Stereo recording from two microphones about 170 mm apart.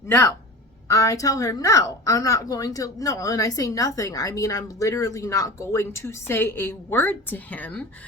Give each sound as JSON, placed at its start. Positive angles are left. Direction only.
{"t": 0.9, "sound": "a woman's voice", "side_deg": 20}